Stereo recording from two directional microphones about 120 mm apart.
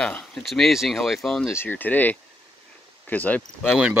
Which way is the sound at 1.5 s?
20° left (ahead or behind).